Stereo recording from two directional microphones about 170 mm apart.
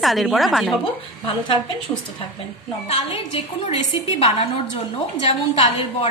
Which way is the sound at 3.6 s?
40° left (ahead or behind).